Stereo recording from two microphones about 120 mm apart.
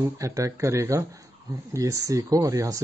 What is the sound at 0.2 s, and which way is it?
Speech, 25° right (ahead or behind).